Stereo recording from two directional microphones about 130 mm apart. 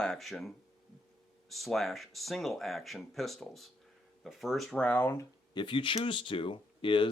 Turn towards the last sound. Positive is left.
turn(degrees=40)  # may be behind; listen again after turning